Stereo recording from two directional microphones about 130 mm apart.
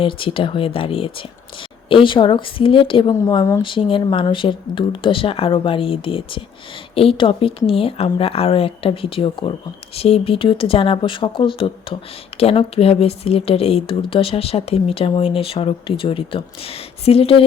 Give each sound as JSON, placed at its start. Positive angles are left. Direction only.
{"t": 0.0, "sound": "a woman's voice", "side_deg": 45}
{"t": 3.1, "sound": "a woman's voice", "side_deg": 30}
{"t": 3.6, "sound": "speech", "side_deg": 40}